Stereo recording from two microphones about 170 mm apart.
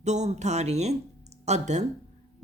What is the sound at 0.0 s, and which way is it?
Speech, 40° right (ahead or behind).